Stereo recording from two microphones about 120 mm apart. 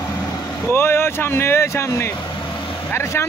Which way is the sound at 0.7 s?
20° left (ahead or behind).